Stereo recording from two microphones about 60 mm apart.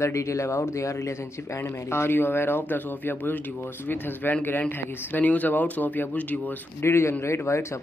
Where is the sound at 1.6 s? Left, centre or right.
Left.